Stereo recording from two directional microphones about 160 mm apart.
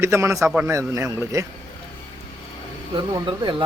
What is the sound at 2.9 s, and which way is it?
Speech, 30° right (ahead or behind).